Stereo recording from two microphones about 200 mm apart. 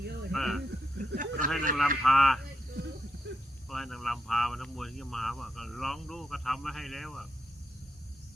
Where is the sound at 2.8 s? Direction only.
55° right (ahead or behind).